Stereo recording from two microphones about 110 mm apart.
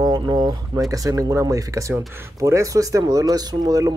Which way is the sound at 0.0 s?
40° right (ahead or behind).